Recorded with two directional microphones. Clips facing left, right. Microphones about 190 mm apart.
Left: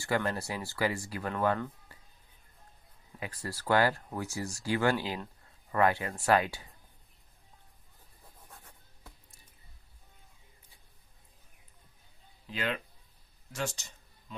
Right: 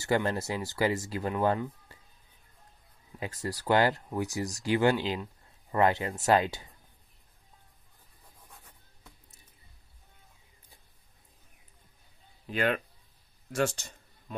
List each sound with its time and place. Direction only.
0.0 s speech: 25° right (ahead or behind)
3.4 s speech: 20° right (ahead or behind)
12.4 s speech: 55° right (ahead or behind)